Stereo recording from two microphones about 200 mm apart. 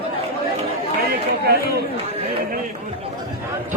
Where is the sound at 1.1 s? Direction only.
50° right (ahead or behind).